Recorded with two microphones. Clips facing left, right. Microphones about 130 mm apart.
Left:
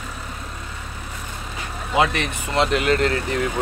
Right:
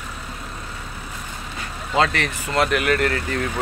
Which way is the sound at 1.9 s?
20° left (ahead or behind).